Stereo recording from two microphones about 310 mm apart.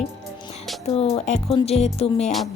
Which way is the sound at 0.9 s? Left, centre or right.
Centre.